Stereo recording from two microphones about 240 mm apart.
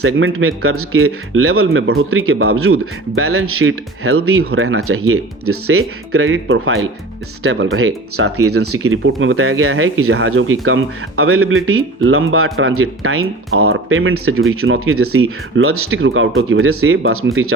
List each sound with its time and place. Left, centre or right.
0.0 s speech: right